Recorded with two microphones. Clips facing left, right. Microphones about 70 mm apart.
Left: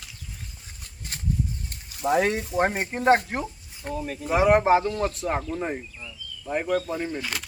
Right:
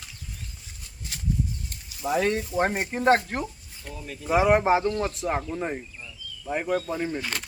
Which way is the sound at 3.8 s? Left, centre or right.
Left.